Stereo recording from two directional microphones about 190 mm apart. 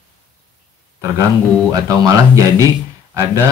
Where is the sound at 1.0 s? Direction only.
20° right (ahead or behind).